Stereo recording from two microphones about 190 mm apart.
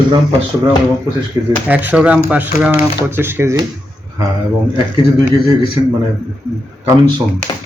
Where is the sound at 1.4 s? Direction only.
15° right (ahead or behind).